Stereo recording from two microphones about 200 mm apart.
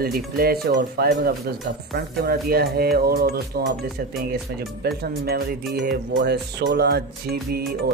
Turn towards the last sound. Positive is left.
turn(degrees=-50)  # may be behind; listen again after turning